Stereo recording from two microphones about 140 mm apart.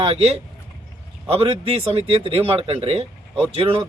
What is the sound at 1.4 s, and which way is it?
Speech, 45° right (ahead or behind).